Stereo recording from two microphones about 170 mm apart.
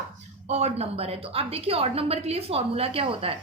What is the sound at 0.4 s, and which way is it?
A woman's voice, 40° right (ahead or behind).